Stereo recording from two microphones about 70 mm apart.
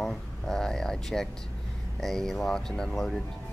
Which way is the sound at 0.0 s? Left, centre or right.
Centre.